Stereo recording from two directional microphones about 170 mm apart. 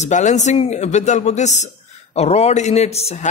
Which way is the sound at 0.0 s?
45° left (ahead or behind).